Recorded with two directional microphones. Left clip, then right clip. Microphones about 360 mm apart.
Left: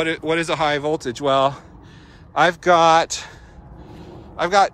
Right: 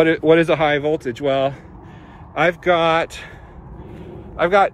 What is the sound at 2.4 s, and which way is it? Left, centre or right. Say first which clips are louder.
Speech: left 2 dB; centre.